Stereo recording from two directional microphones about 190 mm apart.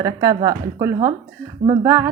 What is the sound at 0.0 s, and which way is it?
A woman's voice, 15° right (ahead or behind).